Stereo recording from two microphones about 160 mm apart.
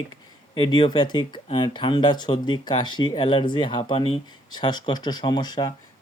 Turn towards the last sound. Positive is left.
turn(degrees=25)  # may be behind; listen again after turning